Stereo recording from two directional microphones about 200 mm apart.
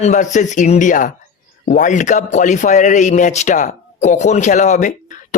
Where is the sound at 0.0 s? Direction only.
35° left (ahead or behind).